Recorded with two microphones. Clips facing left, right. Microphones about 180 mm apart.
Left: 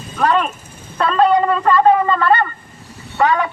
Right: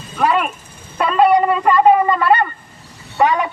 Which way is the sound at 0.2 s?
10° right (ahead or behind).